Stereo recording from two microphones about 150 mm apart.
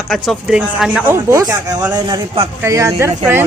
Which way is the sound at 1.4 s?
25° right (ahead or behind).